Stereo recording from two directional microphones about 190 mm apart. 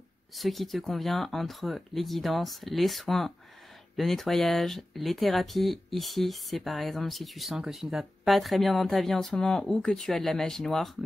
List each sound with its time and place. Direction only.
0.4 s speech: centre (ahead or behind)